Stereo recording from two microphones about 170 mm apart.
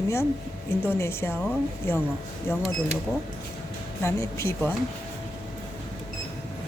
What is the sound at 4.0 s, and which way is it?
Speech, 15° left (ahead or behind).